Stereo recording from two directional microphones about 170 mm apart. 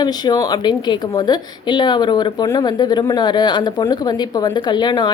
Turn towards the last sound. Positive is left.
turn(degrees=25)  # may be behind; listen again after turning